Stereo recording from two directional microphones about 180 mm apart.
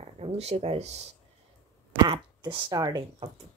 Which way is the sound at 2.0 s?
25° right (ahead or behind).